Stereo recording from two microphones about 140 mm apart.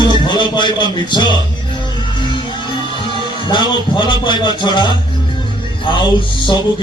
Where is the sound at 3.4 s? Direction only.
35° left (ahead or behind).